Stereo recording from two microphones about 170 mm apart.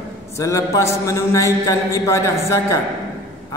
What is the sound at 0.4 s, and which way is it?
A man's voice, 20° left (ahead or behind).